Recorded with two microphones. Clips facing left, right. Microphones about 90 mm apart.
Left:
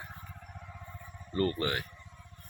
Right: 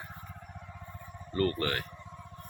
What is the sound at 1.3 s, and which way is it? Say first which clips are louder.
Speech: right 1 dB; 20° left (ahead or behind).